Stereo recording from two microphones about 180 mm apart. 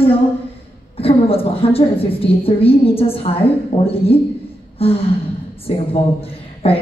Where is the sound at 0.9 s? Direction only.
30° left (ahead or behind).